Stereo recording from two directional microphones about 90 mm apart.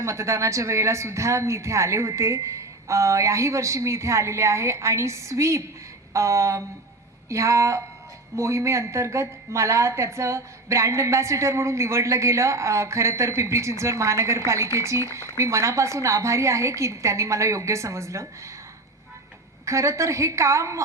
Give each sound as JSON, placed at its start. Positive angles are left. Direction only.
{"t": 0.0, "sound": "a woman's voice", "side_deg": -35}
{"t": 19.6, "sound": "a woman's voice", "side_deg": -35}